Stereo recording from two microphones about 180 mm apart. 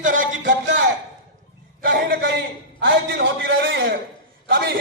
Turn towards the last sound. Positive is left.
turn(degrees=-60)  # may be behind; listen again after turning